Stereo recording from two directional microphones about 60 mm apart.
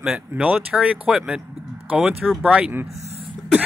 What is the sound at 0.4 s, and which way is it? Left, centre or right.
Speech, right.